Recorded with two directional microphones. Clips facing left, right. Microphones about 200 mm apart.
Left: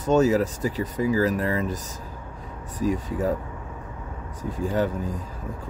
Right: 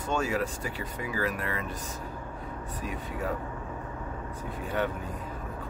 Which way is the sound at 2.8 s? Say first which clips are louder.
Left 14 dB; 30° left (ahead or behind).